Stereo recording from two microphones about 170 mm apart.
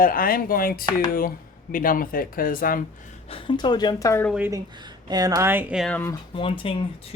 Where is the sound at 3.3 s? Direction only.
30° left (ahead or behind).